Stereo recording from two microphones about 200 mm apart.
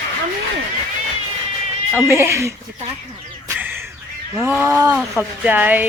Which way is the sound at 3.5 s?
10° right (ahead or behind).